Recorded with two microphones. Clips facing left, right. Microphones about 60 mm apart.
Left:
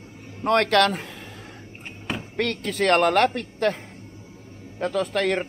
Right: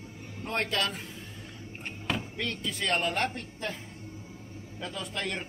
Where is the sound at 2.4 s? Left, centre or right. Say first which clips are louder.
Left 9 dB; left.